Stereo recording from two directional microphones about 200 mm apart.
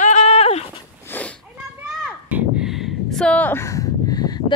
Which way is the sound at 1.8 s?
5° right (ahead or behind).